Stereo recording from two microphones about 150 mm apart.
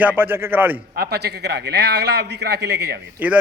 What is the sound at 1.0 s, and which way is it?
A man's voice, 90° right.